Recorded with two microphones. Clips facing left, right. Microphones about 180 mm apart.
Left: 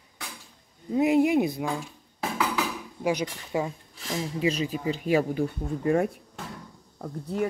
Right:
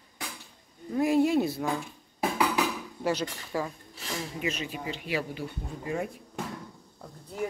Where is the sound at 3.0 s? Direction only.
15° left (ahead or behind).